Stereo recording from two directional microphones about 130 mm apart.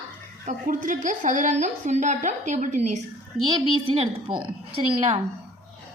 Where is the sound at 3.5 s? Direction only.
45° right (ahead or behind).